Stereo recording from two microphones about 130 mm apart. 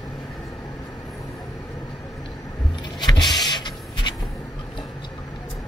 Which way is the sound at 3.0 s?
35° left (ahead or behind).